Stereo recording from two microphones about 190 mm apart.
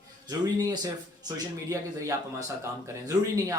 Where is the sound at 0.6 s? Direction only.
20° right (ahead or behind).